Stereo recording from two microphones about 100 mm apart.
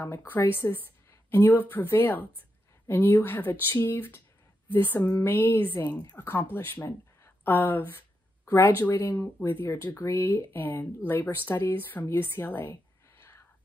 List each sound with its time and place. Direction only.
0.0 s speech: 25° left (ahead or behind)
5.9 s a woman's voice: 40° left (ahead or behind)
6.1 s speech: 20° left (ahead or behind)